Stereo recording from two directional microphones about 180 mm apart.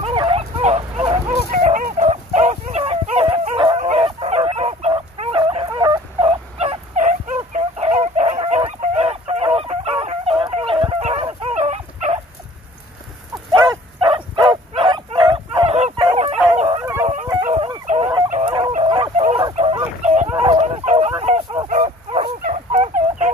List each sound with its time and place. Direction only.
0.0 s dog: 30° right (ahead or behind)
1.5 s dog: 50° right (ahead or behind); by 3.8 s 30° right (ahead or behind)
4.0 s fowl: 30° right (ahead or behind)
11.5 s dog: 40° right (ahead or behind)
13.5 s bow-wow: 25° right (ahead or behind)
16.5 s howl: 30° right (ahead or behind)
17.0 s dog: 40° right (ahead or behind)
17.6 s dog: 25° right (ahead or behind)
17.8 s fowl: 35° right (ahead or behind)
20.0 s dog: 40° right (ahead or behind)
20.3 s bow-wow: 30° right (ahead or behind)
21.2 s a sound: 25° right (ahead or behind)
21.6 s fowl: 40° right (ahead or behind)